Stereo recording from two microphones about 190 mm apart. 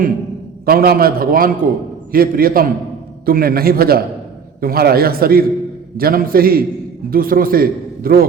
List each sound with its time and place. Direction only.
0.6 s a man's voice: 50° right (ahead or behind)